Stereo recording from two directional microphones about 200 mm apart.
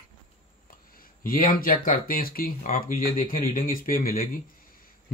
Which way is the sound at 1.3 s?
45° left (ahead or behind).